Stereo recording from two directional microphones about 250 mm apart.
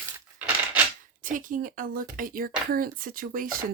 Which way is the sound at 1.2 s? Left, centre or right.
Right.